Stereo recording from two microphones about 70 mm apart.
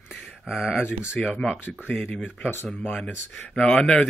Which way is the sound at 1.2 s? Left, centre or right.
Centre.